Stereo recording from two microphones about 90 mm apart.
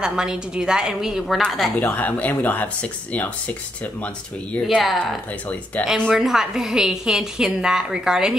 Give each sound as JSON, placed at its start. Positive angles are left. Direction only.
{"t": 0.0, "sound": "a woman's voice", "side_deg": -10}
{"t": 1.8, "sound": "speech", "side_deg": 20}
{"t": 4.6, "sound": "a woman's voice", "side_deg": 0}
{"t": 5.8, "sound": "speech", "side_deg": 20}
{"t": 6.1, "sound": "a woman's voice", "side_deg": -5}